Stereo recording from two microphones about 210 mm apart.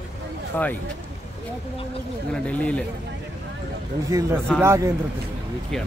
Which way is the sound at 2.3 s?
5° left (ahead or behind).